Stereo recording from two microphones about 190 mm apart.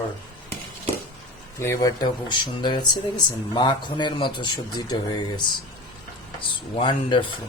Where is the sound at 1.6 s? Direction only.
15° left (ahead or behind).